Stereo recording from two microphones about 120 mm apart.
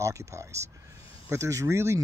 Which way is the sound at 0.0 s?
25° right (ahead or behind).